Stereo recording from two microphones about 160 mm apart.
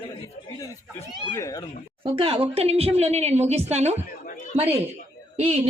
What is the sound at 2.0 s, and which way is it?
A woman's voice, 35° right (ahead or behind).